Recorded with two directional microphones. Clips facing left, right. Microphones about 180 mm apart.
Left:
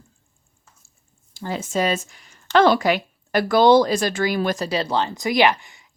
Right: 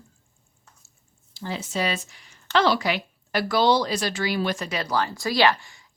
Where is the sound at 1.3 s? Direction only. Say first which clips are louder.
Left 5 dB; 50° left (ahead or behind); by 5.9 s 20° left (ahead or behind).